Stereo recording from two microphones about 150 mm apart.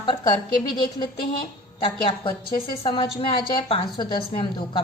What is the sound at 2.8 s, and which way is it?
A woman's voice, 35° left (ahead or behind).